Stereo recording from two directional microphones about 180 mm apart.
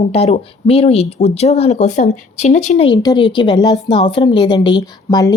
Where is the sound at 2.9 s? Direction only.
25° left (ahead or behind).